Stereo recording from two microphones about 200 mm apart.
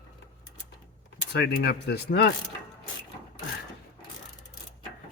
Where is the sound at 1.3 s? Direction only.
60° left (ahead or behind).